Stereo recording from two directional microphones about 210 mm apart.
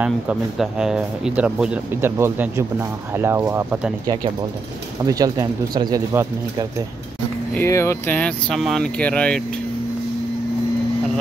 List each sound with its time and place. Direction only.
0.0 s speech: 5° right (ahead or behind)
5.0 s speech: 15° right (ahead or behind)
7.5 s speech: 15° left (ahead or behind)